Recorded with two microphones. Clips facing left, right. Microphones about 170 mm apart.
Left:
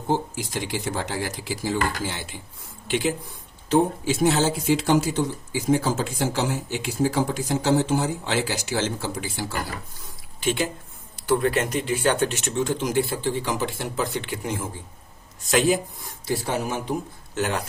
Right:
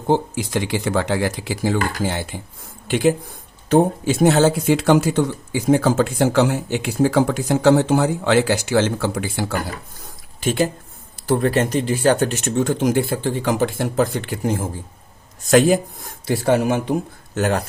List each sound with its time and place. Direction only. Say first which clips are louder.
0.1 s speech: right 6 dB; 70° right (ahead or behind)
10.4 s speech: right 5 dB; 40° right (ahead or behind); by 16.9 s 70° right (ahead or behind)
17.3 s speech: right 6 dB; 45° right (ahead or behind)